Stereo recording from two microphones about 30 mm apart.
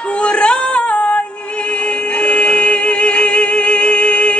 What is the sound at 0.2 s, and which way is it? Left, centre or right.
Female singing, left.